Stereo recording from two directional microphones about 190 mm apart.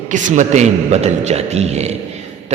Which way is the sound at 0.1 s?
40° right (ahead or behind).